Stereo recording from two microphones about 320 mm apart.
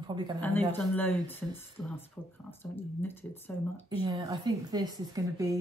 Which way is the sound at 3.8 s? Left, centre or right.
Centre.